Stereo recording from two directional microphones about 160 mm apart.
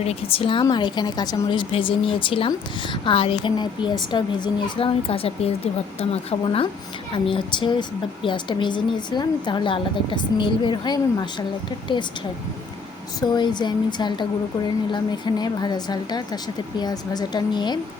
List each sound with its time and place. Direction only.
0.0 s a woman's voice: 40° left (ahead or behind)
13.3 s speech: 25° left (ahead or behind)